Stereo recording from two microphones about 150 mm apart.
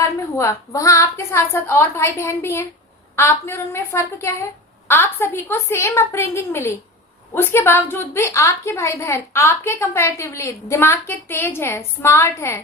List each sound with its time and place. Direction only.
0.0 s a woman's voice: 20° left (ahead or behind)